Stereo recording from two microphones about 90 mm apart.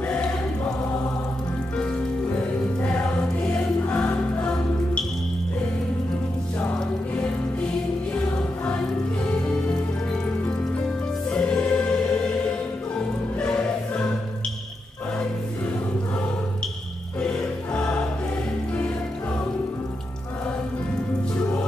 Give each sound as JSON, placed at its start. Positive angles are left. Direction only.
{"t": 2.8, "sound": "music", "side_deg": 15}
{"t": 8.6, "sound": "music", "side_deg": 10}
{"t": 11.2, "sound": "music", "side_deg": 10}
{"t": 13.4, "sound": "choir", "side_deg": 10}
{"t": 17.2, "sound": "music", "side_deg": 10}
{"t": 21.4, "sound": "music", "side_deg": 15}